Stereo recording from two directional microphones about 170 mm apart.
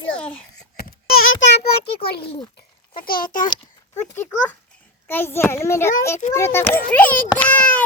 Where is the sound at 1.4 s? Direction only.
85° left; by 2.2 s 65° left (ahead or behind).